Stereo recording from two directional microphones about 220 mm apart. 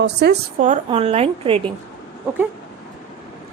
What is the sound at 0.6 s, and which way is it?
Speech, 30° right (ahead or behind).